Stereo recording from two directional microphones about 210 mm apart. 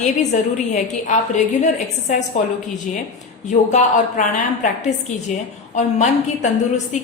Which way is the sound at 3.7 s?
35° left (ahead or behind).